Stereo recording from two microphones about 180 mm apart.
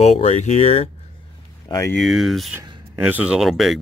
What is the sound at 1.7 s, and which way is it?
Speech, 25° left (ahead or behind).